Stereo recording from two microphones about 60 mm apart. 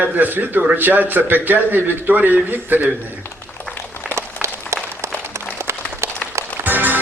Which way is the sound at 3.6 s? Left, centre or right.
Left.